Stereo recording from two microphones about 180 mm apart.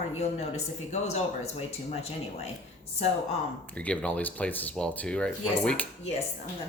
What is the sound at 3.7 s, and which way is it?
Speech, 5° left (ahead or behind).